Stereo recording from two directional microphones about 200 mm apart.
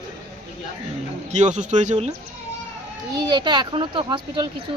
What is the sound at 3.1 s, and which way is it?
Speech, 20° right (ahead or behind).